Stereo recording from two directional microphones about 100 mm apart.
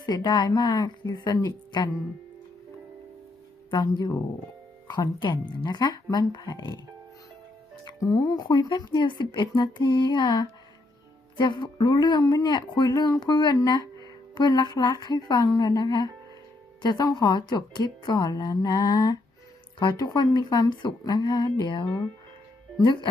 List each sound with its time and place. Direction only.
0.0 s speech: 40° left (ahead or behind)
3.7 s speech: 45° left (ahead or behind)
8.1 s speech: 40° left (ahead or behind)